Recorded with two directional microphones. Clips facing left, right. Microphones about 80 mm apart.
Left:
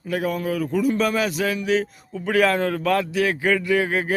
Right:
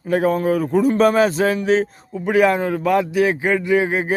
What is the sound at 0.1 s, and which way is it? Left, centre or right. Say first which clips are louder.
Speech: right 7 dB; right.